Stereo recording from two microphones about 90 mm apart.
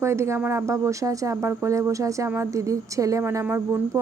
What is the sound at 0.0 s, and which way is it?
Speech, 30° right (ahead or behind).